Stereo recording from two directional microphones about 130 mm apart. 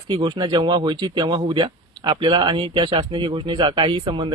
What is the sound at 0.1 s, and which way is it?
Speech, 40° right (ahead or behind).